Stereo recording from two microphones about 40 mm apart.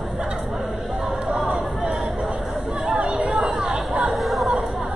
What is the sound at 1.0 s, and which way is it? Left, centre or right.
Chatter, centre.